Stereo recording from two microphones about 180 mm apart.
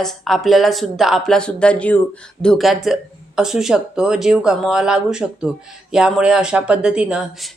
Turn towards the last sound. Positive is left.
turn(degrees=-5)  # may be behind; listen again after turning